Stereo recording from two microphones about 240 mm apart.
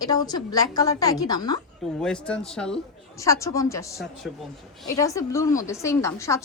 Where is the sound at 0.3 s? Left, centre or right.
Centre.